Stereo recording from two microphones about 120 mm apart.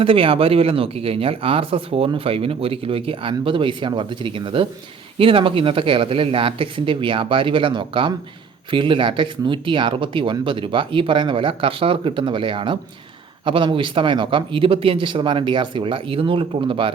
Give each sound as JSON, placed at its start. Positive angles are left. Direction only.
{"t": 0.0, "sound": "speech", "side_deg": -50}